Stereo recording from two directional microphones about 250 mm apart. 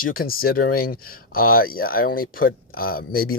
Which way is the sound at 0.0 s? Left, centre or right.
Left.